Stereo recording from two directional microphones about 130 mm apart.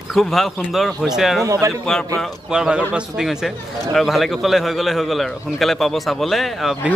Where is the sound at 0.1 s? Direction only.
Centre (ahead or behind).